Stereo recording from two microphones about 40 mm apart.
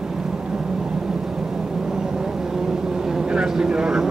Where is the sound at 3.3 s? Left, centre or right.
Centre.